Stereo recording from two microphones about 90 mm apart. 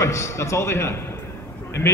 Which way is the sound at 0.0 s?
35° left (ahead or behind).